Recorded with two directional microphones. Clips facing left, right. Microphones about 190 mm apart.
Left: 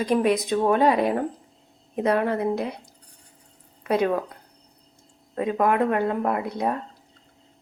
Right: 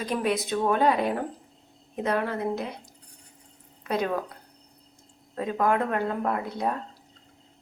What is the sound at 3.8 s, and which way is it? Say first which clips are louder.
Speech: left 5 dB; 5° left (ahead or behind).